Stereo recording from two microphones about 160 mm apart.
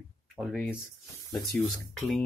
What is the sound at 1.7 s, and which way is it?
Speech, centre (ahead or behind).